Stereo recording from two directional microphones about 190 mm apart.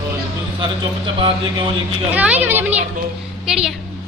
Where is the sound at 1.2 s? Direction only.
25° right (ahead or behind).